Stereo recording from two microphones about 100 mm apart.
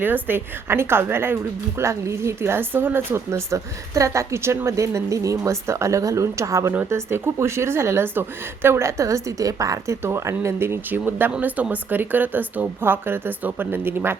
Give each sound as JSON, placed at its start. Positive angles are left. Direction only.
{"t": 0.0, "sound": "a woman's voice", "side_deg": -20}